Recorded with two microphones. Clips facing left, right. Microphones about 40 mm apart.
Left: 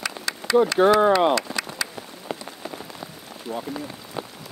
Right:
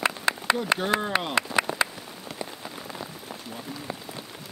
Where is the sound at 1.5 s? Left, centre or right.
Centre.